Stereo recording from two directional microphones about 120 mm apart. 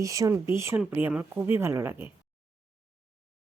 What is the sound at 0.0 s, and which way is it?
A woman's voice, 25° right (ahead or behind).